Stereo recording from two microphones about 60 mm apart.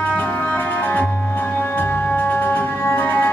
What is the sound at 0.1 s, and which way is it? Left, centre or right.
Music, left.